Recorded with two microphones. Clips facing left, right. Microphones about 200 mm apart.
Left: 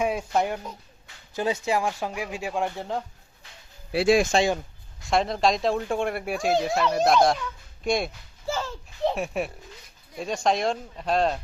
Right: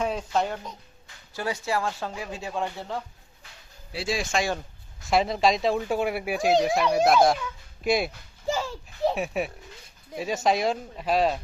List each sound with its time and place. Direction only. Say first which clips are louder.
0.0 s speech: left 2 dB; 10° left (ahead or behind)
3.9 s speech: left 10 dB; 60° left (ahead or behind)
5.0 s speech: even; centre (ahead or behind)
8.5 s children playing: right 2 dB; 15° right (ahead or behind)
9.0 s speech: even; centre (ahead or behind)